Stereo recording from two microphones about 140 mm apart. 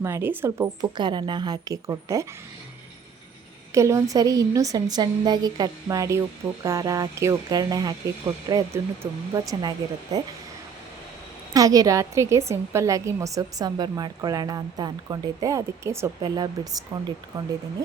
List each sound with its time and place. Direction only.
0.0 s speech: 15° right (ahead or behind)
0.8 s a woman's voice: 30° right (ahead or behind)
3.8 s a woman's voice: 20° right (ahead or behind)
11.5 s a woman's voice: 25° right (ahead or behind)